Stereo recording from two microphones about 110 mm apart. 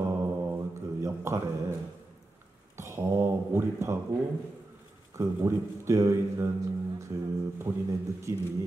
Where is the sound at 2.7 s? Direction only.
25° right (ahead or behind).